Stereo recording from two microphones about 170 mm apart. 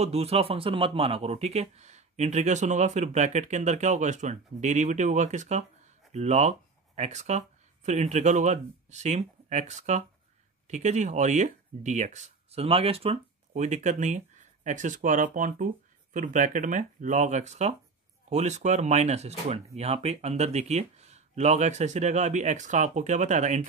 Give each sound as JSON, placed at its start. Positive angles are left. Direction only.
{"t": 0.0, "sound": "a man's voice", "side_deg": -35}